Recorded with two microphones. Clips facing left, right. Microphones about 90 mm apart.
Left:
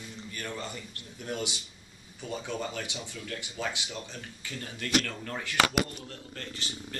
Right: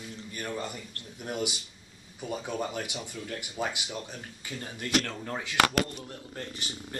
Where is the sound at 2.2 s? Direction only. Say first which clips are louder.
Right 2 dB; 15° right (ahead or behind).